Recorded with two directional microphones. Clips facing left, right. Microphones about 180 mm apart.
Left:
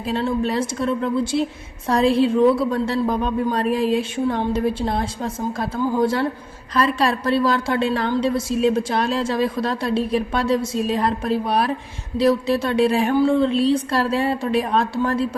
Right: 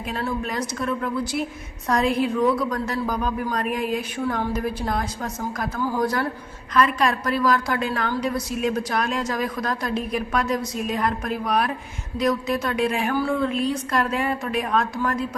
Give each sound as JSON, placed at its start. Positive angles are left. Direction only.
{"t": 0.0, "sound": "a woman's voice", "side_deg": 25}